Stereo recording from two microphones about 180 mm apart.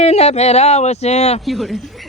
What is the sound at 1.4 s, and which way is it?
Speech, centre (ahead or behind).